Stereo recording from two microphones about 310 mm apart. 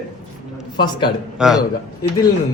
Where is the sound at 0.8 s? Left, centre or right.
Centre.